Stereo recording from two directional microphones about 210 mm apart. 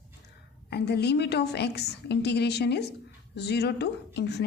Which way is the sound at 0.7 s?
50° left (ahead or behind).